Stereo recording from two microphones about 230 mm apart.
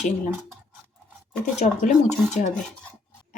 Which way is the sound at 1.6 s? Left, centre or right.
Left.